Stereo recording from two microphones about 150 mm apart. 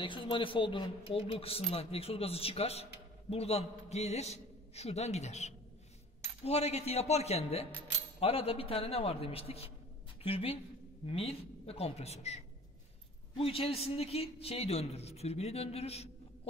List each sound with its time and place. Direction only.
0.0 s a man's voice: 35° left (ahead or behind)